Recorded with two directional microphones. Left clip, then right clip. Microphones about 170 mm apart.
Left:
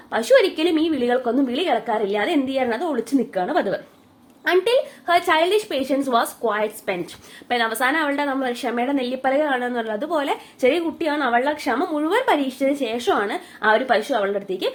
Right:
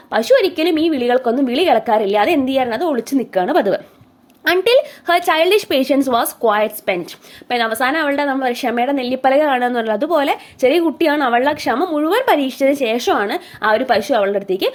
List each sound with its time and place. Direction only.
0.1 s speech: 25° right (ahead or behind)